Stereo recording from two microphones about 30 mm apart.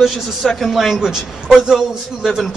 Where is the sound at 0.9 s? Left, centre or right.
Centre.